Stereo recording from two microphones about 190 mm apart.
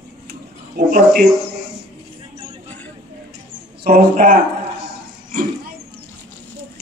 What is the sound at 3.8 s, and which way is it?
Speech, 50° right (ahead or behind).